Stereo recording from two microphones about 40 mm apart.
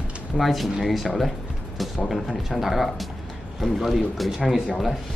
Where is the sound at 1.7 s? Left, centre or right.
Centre.